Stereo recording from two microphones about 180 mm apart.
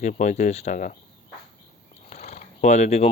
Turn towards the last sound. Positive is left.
turn(degrees=40)  # may be behind; listen again after turning